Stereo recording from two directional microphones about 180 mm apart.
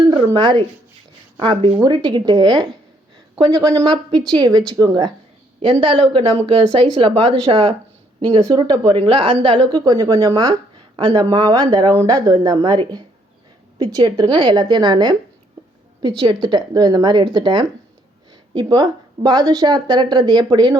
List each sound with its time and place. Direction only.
0.3 s a woman's voice: 25° right (ahead or behind)